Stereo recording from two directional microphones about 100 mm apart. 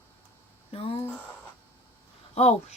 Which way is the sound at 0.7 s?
65° left (ahead or behind).